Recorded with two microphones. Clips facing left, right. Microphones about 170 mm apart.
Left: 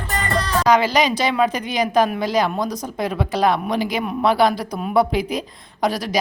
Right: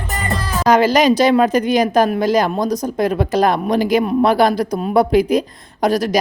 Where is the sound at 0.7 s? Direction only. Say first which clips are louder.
Right 5 dB; 45° right (ahead or behind).